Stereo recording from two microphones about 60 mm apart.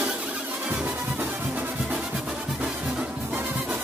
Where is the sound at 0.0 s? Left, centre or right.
Right.